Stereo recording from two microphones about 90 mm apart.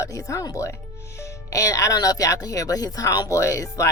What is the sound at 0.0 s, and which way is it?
Speech, 35° left (ahead or behind).